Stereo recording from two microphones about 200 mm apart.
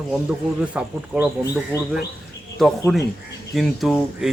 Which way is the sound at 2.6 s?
Centre (ahead or behind).